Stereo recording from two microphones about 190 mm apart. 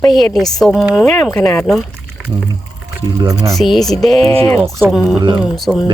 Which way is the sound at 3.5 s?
Centre (ahead or behind).